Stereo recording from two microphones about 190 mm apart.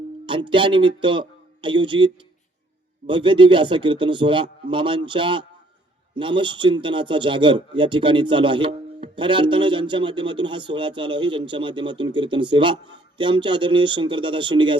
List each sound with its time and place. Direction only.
0.3 s a man's voice: 25° right (ahead or behind)